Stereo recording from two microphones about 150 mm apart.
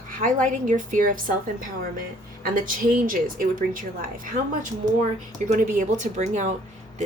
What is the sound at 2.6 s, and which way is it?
Speech, 70° right (ahead or behind).